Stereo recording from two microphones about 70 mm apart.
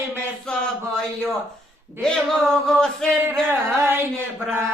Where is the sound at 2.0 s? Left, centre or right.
Centre.